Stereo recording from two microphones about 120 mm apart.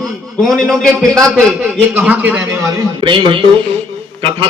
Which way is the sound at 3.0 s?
45° right (ahead or behind).